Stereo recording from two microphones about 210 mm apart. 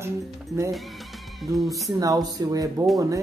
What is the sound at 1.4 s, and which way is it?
Speech, centre (ahead or behind).